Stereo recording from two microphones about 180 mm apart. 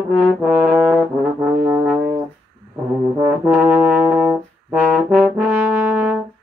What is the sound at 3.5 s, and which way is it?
Brass instrument, 5° right (ahead or behind).